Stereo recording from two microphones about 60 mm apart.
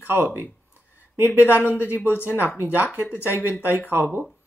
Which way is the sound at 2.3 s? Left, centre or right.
Right.